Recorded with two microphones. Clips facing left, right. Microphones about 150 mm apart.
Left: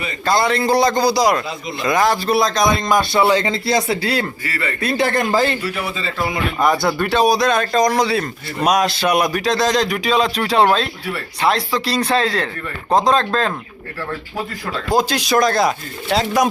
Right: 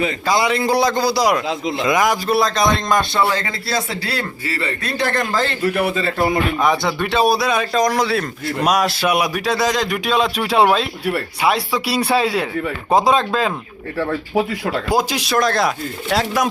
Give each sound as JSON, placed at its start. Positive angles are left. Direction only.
{"t": 0.3, "sound": "a man's voice", "side_deg": -10}
{"t": 3.2, "sound": "speech", "side_deg": 20}
{"t": 4.4, "sound": "a man's voice", "side_deg": -30}
{"t": 4.8, "sound": "speech", "side_deg": 10}
{"t": 5.6, "sound": "speech", "side_deg": -55}
{"t": 6.6, "sound": "a man's voice", "side_deg": 0}
{"t": 14.5, "sound": "speech", "side_deg": -70}
{"t": 14.9, "sound": "a man's voice", "side_deg": -5}